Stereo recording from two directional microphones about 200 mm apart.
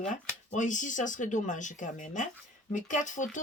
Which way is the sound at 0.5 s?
40° left (ahead or behind).